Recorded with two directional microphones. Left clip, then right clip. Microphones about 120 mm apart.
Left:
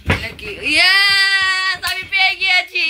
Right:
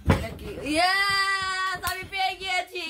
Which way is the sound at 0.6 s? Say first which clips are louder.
Left 10 dB; 50° right (ahead or behind).